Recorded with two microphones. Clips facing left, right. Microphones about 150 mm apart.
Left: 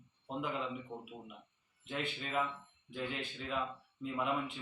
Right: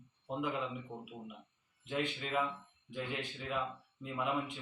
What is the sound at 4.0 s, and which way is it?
Speech, 15° right (ahead or behind).